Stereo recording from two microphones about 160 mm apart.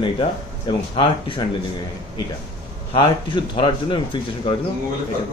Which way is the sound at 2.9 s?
30° left (ahead or behind).